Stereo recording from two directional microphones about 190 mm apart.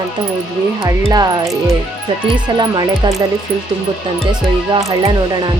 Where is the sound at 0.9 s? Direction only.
20° right (ahead or behind).